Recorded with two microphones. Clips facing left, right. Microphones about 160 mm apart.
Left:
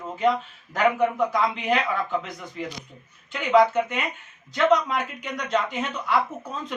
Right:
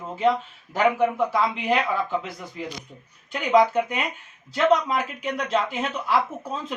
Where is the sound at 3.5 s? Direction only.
10° right (ahead or behind).